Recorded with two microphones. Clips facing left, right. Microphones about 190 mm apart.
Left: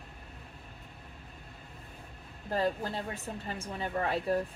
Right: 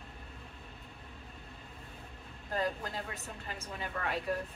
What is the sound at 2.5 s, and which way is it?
A woman's voice, 30° left (ahead or behind).